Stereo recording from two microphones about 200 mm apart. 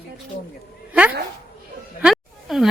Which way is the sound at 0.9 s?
5° right (ahead or behind).